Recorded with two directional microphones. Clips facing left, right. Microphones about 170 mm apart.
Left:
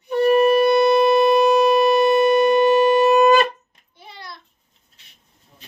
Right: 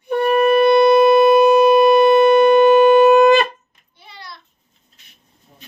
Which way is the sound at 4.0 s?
50° left (ahead or behind).